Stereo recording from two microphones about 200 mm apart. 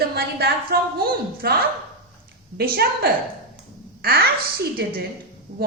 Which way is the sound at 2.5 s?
50° right (ahead or behind).